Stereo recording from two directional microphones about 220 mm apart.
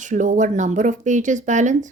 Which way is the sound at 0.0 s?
35° right (ahead or behind).